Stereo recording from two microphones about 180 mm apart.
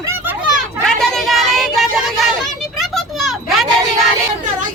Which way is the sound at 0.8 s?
Centre (ahead or behind).